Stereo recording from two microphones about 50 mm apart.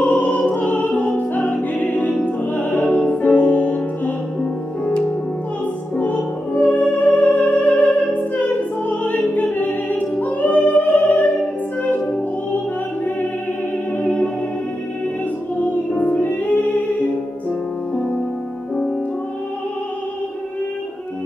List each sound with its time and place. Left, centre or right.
0.0 s opera: left
0.5 s music: left
5.9 s music: left
14.0 s music: left
15.6 s music: left